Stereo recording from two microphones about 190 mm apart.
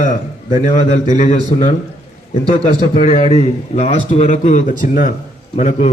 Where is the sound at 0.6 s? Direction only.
40° left (ahead or behind).